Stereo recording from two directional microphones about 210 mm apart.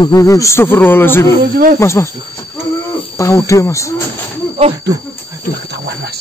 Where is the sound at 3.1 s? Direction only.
15° left (ahead or behind).